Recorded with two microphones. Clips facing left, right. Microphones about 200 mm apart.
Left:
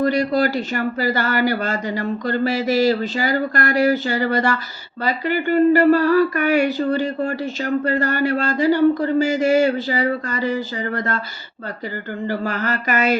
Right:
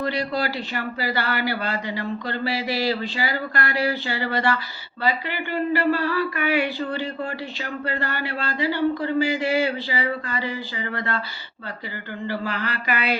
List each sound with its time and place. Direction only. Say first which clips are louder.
0.0 s speech: left 7 dB; 45° left (ahead or behind)
12.3 s speech: left 5 dB; 45° left (ahead or behind)